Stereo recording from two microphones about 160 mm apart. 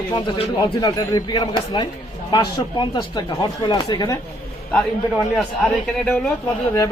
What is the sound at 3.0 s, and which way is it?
A man's voice, 25° left (ahead or behind).